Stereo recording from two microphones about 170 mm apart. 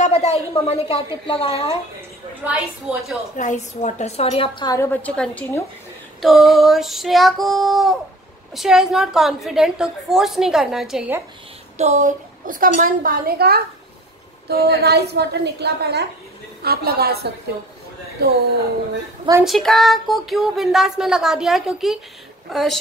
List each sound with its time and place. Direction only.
0.0 s a woman's voice: 40° left (ahead or behind)
2.0 s a woman's voice: 10° right (ahead or behind)
3.3 s a woman's voice: 45° left (ahead or behind); by 4.7 s 30° left (ahead or behind)
4.7 s a woman's voice: 10° left (ahead or behind)
11.8 s a woman's voice: 45° right (ahead or behind); by 18.3 s 70° right (ahead or behind)
19.4 s a woman's voice: centre (ahead or behind)